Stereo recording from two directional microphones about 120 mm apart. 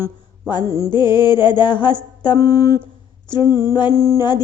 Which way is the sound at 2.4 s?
30° left (ahead or behind).